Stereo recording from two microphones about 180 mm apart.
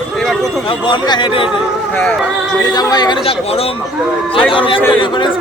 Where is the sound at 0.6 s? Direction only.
25° left (ahead or behind).